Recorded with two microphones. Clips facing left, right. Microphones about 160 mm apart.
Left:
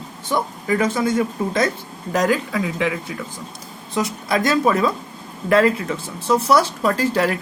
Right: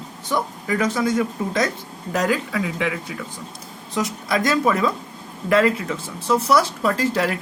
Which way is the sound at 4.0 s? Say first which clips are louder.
Left 2 dB; 25° left (ahead or behind).